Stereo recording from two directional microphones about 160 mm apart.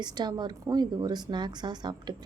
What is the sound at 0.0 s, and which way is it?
A woman's voice, 25° right (ahead or behind).